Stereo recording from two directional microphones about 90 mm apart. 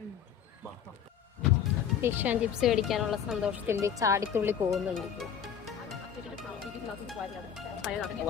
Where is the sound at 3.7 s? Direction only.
35° right (ahead or behind).